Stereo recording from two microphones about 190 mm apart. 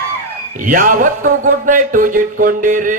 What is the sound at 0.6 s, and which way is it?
A man's voice, 45° right (ahead or behind).